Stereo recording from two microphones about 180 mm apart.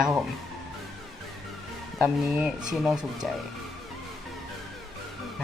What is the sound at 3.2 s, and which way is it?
Speech, centre (ahead or behind).